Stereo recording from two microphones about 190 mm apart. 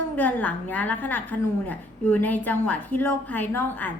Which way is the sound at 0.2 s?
10° left (ahead or behind).